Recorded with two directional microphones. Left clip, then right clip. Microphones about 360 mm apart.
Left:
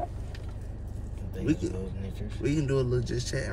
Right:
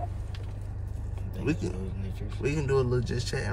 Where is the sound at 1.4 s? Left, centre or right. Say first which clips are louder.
Left 2 dB; centre.